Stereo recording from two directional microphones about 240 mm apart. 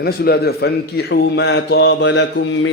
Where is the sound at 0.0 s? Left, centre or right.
Left.